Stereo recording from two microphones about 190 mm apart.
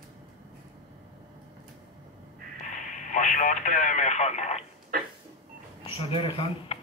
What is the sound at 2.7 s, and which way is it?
Radio, 40° left (ahead or behind).